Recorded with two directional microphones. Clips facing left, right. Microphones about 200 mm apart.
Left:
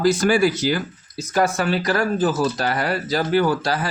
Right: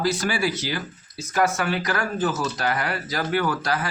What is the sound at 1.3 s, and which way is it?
Speech, 35° left (ahead or behind).